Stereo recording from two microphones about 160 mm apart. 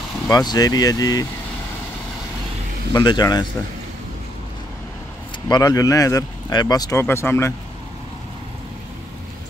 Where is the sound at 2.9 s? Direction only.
25° left (ahead or behind).